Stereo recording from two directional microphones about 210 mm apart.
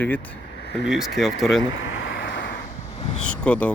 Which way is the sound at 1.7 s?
65° left (ahead or behind).